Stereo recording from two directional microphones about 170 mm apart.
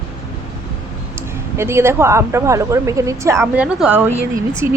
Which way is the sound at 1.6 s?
15° right (ahead or behind).